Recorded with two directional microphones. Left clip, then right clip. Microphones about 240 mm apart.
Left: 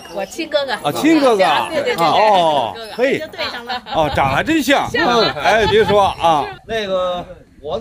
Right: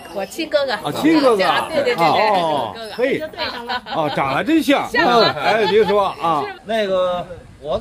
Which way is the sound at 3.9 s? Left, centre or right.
Left.